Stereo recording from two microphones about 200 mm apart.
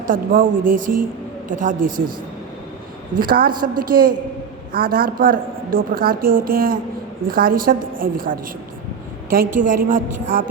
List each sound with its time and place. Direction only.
0.1 s a woman's voice: 45° right (ahead or behind)
3.2 s a woman's voice: 45° right (ahead or behind)